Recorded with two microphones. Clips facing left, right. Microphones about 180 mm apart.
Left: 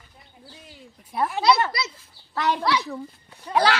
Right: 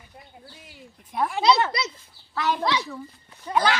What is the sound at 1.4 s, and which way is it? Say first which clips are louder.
A child's voice: even; 20° right (ahead or behind).